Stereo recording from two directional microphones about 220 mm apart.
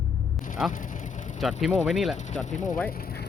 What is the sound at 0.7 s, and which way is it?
Vehicle, 35° left (ahead or behind).